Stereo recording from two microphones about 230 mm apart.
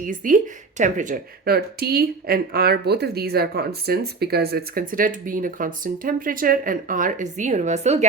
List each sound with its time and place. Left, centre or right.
0.0 s speech: right